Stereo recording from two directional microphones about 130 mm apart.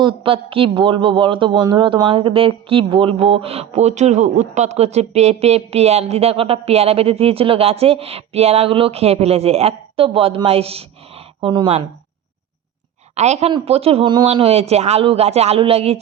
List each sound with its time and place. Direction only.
0.0 s a man's voice: 40° right (ahead or behind)
11.3 s speech: 35° right (ahead or behind)
13.1 s a woman's voice: 60° right (ahead or behind)
14.1 s speech: 35° right (ahead or behind)